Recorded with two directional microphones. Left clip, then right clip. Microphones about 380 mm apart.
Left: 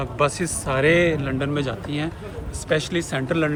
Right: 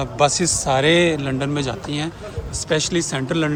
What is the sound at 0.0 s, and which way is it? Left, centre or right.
A man's voice, centre.